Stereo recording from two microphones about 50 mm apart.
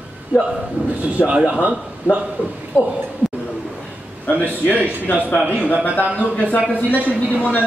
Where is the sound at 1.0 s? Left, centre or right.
Right.